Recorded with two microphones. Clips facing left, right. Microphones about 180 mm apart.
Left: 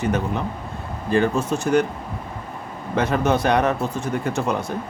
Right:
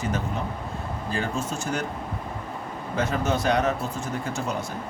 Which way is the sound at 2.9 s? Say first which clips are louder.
Left 6 dB; 65° left (ahead or behind).